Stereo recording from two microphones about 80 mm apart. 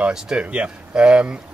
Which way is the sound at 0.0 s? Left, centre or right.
Centre.